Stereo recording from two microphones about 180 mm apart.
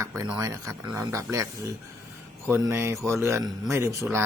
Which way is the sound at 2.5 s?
15° right (ahead or behind).